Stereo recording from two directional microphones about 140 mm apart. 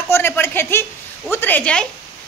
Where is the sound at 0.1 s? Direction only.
15° left (ahead or behind).